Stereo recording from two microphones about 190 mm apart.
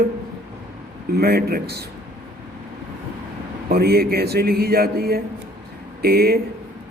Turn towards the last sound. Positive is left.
turn(degrees=-55)  # may be behind; listen again after turning